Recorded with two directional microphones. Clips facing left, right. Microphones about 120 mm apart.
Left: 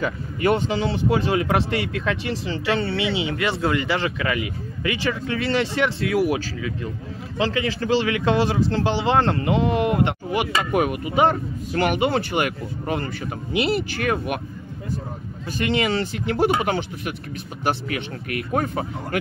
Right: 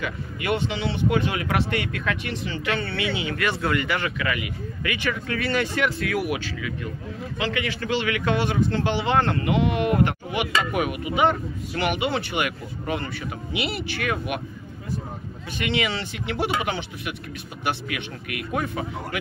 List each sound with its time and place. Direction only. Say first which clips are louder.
0.0 s speech: left 7 dB; 40° left (ahead or behind)
15.6 s speech: left 4 dB; 40° left (ahead or behind)